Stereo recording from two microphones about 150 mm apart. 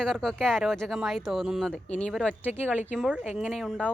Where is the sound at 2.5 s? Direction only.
10° right (ahead or behind).